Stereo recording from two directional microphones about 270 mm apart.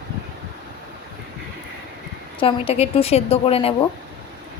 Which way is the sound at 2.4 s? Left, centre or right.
Centre.